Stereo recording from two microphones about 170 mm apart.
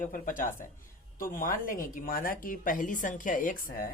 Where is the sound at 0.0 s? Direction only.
55° left (ahead or behind).